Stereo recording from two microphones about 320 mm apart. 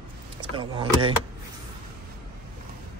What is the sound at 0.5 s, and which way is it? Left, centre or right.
Speech, centre.